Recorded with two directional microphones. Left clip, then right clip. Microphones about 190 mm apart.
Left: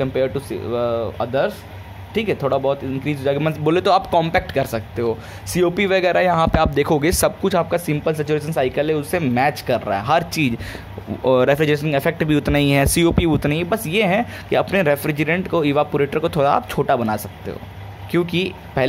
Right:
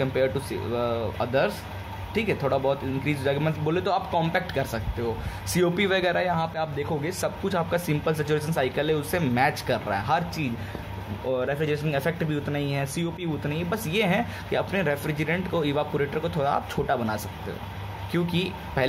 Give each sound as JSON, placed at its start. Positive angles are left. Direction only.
{"t": 0.0, "sound": "speech", "side_deg": 30}